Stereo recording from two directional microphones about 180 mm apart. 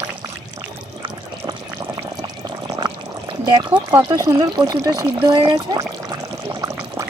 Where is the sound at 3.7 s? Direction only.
25° right (ahead or behind).